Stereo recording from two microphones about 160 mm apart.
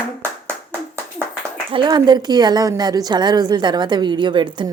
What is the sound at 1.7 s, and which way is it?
A woman's voice, 30° right (ahead or behind).